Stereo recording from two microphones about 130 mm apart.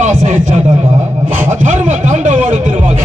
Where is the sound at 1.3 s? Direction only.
15° right (ahead or behind).